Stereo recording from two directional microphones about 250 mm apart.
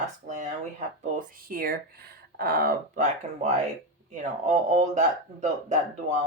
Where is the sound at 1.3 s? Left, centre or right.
Right.